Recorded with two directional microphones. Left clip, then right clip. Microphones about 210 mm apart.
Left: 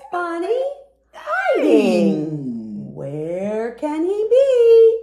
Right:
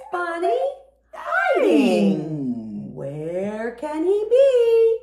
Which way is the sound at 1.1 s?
10° right (ahead or behind).